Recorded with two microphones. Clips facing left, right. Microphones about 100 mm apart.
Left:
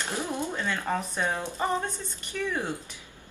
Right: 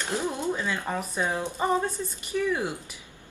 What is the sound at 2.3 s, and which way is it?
Speech, 25° right (ahead or behind).